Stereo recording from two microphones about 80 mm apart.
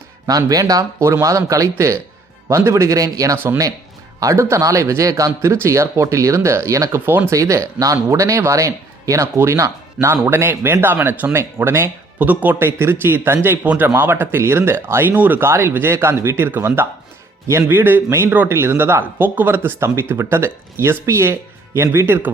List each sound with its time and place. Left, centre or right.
0.3 s speech: right
3.3 s speech: right
4.2 s speech: right
7.0 s speech: right
7.3 s speech: right